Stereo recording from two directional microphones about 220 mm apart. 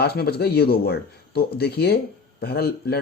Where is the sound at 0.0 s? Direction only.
45° left (ahead or behind).